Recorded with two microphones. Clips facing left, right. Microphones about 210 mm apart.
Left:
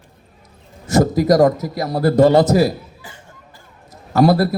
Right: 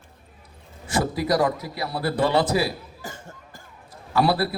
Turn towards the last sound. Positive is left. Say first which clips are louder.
# left 7 dB
turn(degrees=45)  # may be behind; listen again after turning